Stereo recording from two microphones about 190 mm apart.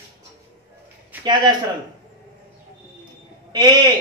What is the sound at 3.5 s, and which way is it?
Speech, 20° right (ahead or behind).